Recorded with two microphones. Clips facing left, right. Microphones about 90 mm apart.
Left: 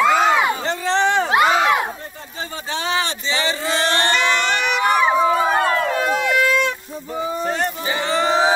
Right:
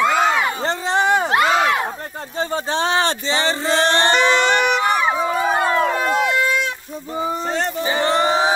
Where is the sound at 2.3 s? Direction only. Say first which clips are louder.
Right 6 dB; 35° right (ahead or behind).